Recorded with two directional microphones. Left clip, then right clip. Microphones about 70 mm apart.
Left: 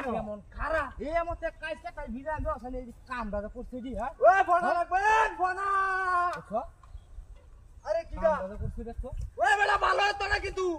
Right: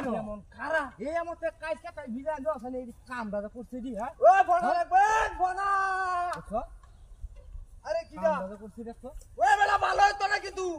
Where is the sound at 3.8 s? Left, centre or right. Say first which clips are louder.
Even; right.